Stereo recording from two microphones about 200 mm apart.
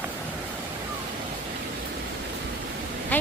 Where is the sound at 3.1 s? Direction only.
10° left (ahead or behind).